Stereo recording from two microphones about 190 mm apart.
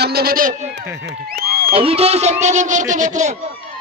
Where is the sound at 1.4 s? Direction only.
55° right (ahead or behind).